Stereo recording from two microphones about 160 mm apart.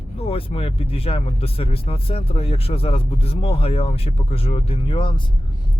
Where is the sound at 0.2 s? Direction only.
35° left (ahead or behind).